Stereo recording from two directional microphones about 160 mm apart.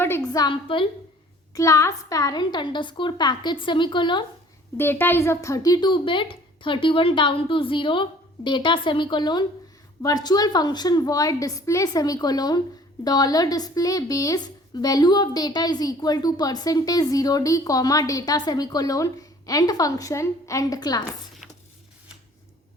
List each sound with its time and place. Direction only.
0.3 s speech: 30° left (ahead or behind)
1.5 s speech: 20° left (ahead or behind)
4.8 s speech: 15° left (ahead or behind)